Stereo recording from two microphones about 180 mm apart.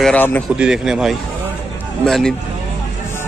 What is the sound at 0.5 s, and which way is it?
Speech, 5° right (ahead or behind).